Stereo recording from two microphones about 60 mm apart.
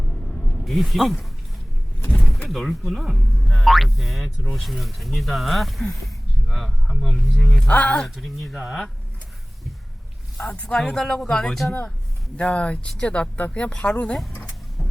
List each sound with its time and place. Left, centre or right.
0.6 s speech: centre
2.1 s door: centre
2.5 s speech: centre
8.1 s speech: centre
10.3 s speech: centre
12.4 s speech: left